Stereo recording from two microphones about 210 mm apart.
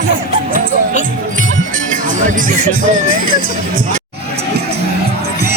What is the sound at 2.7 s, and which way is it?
Music, 40° right (ahead or behind).